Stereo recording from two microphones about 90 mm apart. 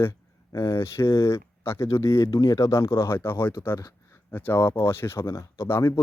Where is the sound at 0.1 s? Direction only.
35° left (ahead or behind).